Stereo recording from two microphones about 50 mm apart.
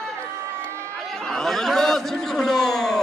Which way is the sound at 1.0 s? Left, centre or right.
Centre.